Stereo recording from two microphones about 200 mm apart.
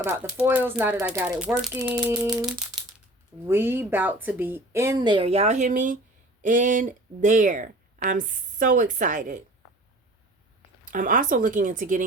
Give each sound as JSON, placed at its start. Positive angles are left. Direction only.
{"t": 0.0, "sound": "speech", "side_deg": -10}
{"t": 10.9, "sound": "speech", "side_deg": -40}